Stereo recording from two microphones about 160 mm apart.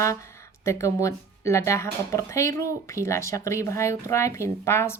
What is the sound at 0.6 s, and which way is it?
Speech, 20° left (ahead or behind).